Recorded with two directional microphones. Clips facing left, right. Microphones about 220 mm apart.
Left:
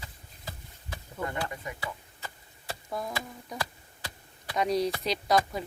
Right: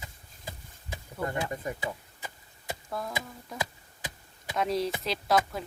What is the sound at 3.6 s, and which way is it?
Tick, 20° right (ahead or behind).